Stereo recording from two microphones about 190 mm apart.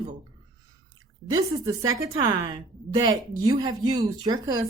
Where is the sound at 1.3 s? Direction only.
20° right (ahead or behind).